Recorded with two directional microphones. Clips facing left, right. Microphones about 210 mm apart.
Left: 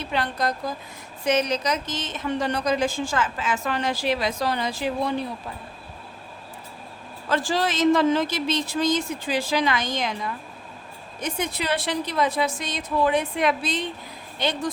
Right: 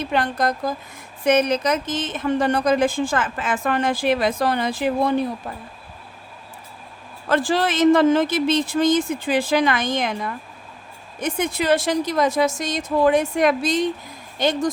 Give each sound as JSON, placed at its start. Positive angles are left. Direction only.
{"t": 0.1, "sound": "a woman's voice", "side_deg": -50}
{"t": 7.3, "sound": "a woman's voice", "side_deg": -55}